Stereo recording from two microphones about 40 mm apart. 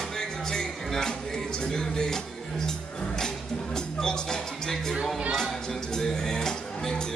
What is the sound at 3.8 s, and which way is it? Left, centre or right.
Music, centre.